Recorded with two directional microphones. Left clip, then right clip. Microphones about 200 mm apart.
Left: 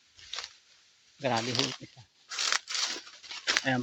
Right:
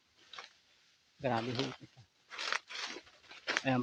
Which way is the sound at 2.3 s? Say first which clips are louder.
Left 7 dB; 55° left (ahead or behind).